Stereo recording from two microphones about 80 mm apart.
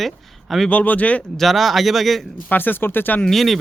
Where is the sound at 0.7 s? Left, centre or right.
Centre.